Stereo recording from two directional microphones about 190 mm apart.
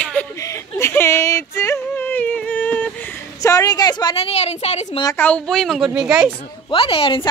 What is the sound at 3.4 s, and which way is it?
A woman's voice, 20° left (ahead or behind).